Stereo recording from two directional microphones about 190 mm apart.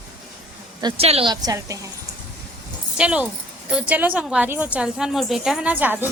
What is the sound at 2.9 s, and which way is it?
A woman's voice, 5° right (ahead or behind).